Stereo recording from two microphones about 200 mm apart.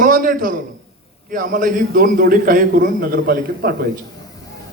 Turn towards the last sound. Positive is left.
turn(degrees=-50)  # may be behind; listen again after turning